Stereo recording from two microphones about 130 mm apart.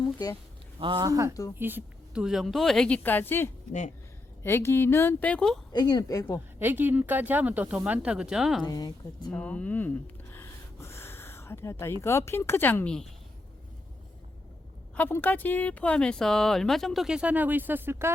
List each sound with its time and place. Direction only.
0.0 s speech: 30° left (ahead or behind)
0.8 s speech: 35° right (ahead or behind)
1.3 s a woman's voice: 25° left (ahead or behind)
1.5 s speech: 15° right (ahead or behind)
2.2 s speech: centre (ahead or behind); by 3.5 s 15° left (ahead or behind)
3.7 s speech: 70° left (ahead or behind)
4.4 s a woman's voice: 20° left (ahead or behind)
5.7 s speech: 35° left (ahead or behind)
6.6 s speech: 15° right (ahead or behind)
8.6 s speech: 30° left (ahead or behind)
9.3 s a woman's voice: 10° left (ahead or behind)
10.3 s a sound: 20° left (ahead or behind)
12.0 s a woman's voice: 20° left (ahead or behind); by 13.1 s 5° left (ahead or behind)
14.9 s speech: 15° left (ahead or behind); by 18.1 s 15° right (ahead or behind)